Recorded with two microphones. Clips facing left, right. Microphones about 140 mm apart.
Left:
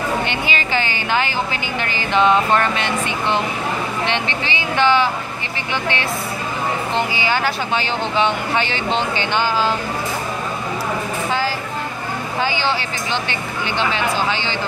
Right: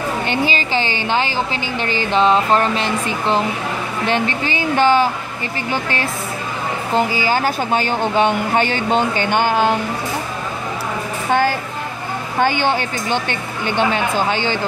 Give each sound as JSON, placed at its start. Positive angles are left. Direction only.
{"t": 0.3, "sound": "speech", "side_deg": -35}
{"t": 4.0, "sound": "speech", "side_deg": -45}
{"t": 7.2, "sound": "speech", "side_deg": -40}
{"t": 11.2, "sound": "speech", "side_deg": -55}